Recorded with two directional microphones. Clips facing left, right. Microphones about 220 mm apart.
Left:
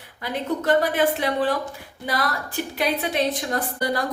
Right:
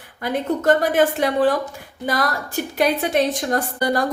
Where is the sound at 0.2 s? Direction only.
45° right (ahead or behind).